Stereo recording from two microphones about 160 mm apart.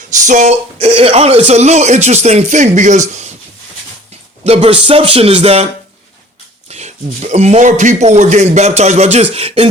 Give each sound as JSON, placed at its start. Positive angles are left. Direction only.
{"t": 0.3, "sound": "speech", "side_deg": -45}
{"t": 4.4, "sound": "music", "side_deg": -35}
{"t": 6.7, "sound": "speech", "side_deg": -45}
{"t": 9.3, "sound": "music", "side_deg": -40}